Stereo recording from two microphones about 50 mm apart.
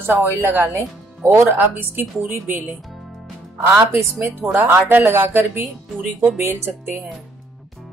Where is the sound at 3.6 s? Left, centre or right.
Right.